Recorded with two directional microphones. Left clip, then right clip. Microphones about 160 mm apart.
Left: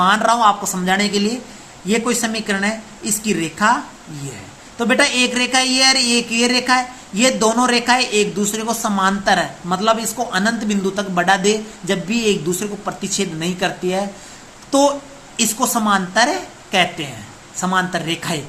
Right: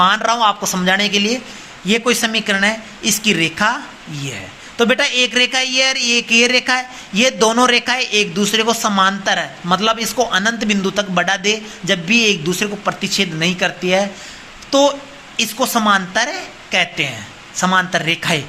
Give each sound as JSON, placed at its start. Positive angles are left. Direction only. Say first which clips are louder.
{"t": 0.0, "sound": "speech", "louder": "even", "side_deg": -25}
{"t": 4.8, "sound": "speech", "louder": "right 1 dB", "side_deg": -25}
{"t": 14.7, "sound": "speech", "louder": "right 2 dB", "side_deg": -10}